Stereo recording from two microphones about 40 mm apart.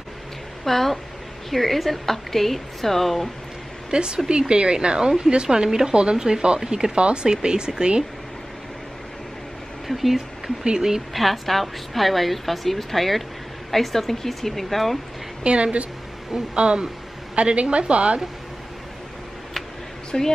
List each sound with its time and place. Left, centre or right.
0.7 s a woman's voice: centre
3.9 s speech: right
9.8 s speech: centre
10.6 s speech: centre
11.1 s a woman's voice: centre
15.4 s speech: right
20.1 s speech: centre